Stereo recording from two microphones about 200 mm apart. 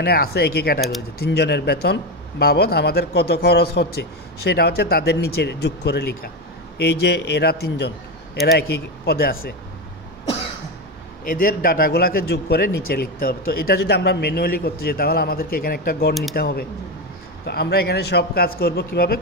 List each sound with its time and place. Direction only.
0.0 s a man's voice: 50° left (ahead or behind)
11.2 s speech: 45° left (ahead or behind)